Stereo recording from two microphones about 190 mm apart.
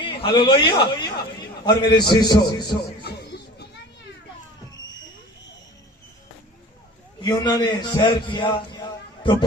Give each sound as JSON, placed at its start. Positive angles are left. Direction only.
{"t": 0.0, "sound": "a man's voice", "side_deg": 30}
{"t": 3.0, "sound": "a sound", "side_deg": 60}
{"t": 7.2, "sound": "a man's voice", "side_deg": 20}